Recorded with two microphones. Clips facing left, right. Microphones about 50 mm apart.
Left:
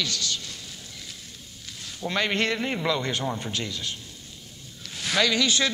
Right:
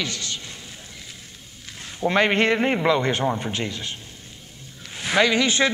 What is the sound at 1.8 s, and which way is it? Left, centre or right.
A man's voice, right.